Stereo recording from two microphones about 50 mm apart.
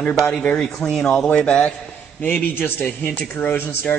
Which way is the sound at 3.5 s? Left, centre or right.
Left.